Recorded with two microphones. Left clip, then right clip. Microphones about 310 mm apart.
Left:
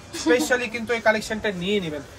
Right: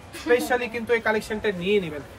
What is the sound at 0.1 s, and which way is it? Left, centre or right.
Speech, centre.